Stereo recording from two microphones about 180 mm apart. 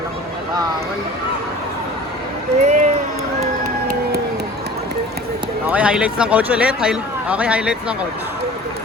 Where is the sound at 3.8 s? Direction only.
60° right (ahead or behind).